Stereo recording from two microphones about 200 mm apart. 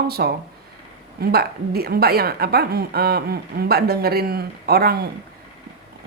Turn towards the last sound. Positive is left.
turn(degrees=-50)  # may be behind; listen again after turning